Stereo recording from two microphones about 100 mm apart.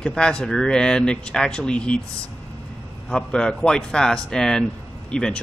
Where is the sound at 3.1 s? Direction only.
10° left (ahead or behind).